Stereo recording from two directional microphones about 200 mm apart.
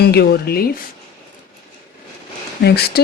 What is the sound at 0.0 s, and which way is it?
Speech, 55° left (ahead or behind).